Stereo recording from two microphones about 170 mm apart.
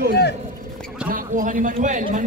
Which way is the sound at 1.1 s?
50° right (ahead or behind).